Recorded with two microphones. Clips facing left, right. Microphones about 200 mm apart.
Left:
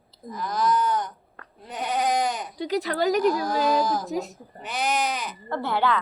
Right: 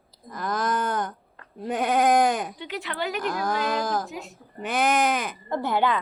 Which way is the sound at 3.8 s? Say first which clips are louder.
Left 1 dB; 55° right (ahead or behind).